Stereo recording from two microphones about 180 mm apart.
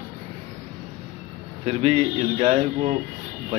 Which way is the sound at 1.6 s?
35° right (ahead or behind).